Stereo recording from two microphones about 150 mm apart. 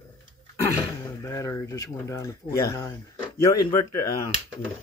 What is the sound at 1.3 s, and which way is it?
Speech, 20° left (ahead or behind).